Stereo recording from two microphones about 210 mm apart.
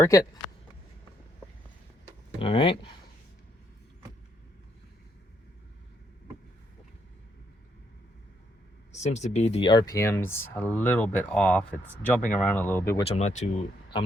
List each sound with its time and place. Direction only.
0.0 s speech: 15° left (ahead or behind)
2.4 s speech: 25° left (ahead or behind)
8.9 s speech: 35° left (ahead or behind); by 13.0 s 10° left (ahead or behind)
13.1 s speech: 30° left (ahead or behind)